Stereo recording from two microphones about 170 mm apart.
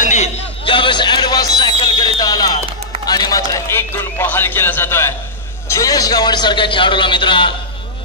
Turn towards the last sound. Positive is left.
turn(degrees=30)  # may be behind; listen again after turning